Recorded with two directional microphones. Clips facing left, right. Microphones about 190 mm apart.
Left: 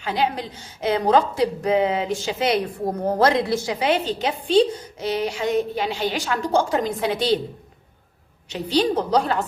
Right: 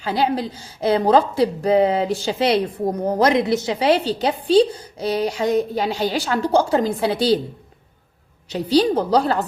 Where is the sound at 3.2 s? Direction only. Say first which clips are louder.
Right 2 dB; 20° right (ahead or behind).